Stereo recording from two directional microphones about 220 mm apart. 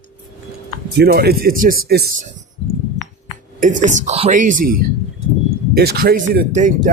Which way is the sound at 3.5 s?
35° right (ahead or behind).